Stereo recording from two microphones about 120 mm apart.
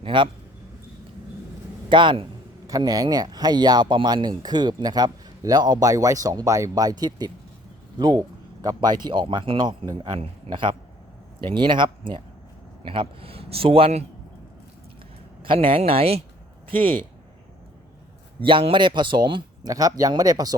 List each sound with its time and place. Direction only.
0.0 s a man's voice: 45° right (ahead or behind)
1.9 s speech: 40° right (ahead or behind)
2.6 s a man's voice: 30° right (ahead or behind); by 14.0 s 50° right (ahead or behind)
15.4 s speech: 45° right (ahead or behind)
18.3 s speech: 45° right (ahead or behind)